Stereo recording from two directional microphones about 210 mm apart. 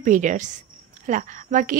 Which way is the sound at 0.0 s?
35° right (ahead or behind).